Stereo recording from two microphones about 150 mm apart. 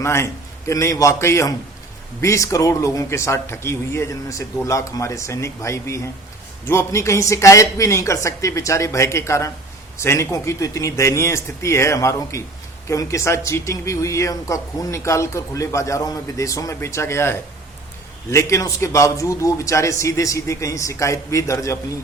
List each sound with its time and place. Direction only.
0.0 s a man's voice: 20° left (ahead or behind)